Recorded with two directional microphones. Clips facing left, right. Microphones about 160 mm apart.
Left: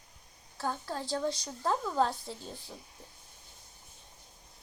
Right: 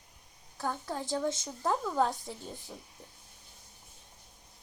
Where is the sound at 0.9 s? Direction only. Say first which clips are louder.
Right 1 dB; 20° right (ahead or behind).